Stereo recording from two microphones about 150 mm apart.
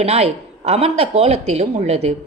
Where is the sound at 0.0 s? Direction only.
45° right (ahead or behind).